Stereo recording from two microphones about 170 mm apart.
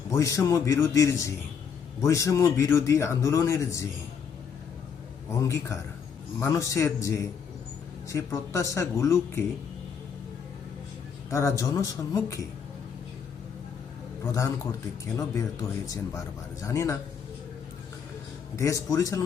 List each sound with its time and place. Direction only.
0.1 s a man's voice: 20° left (ahead or behind)
5.4 s a man's voice: 15° left (ahead or behind)
11.3 s a man's voice: 15° left (ahead or behind)
14.3 s a man's voice: 15° left (ahead or behind)
18.5 s a man's voice: 20° left (ahead or behind)